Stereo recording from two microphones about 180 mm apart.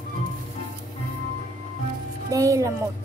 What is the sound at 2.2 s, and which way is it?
Music, 20° right (ahead or behind).